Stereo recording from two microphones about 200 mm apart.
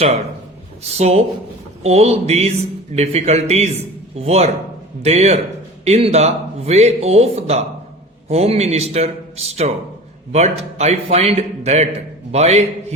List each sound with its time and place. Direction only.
0.9 s speech: 30° right (ahead or behind)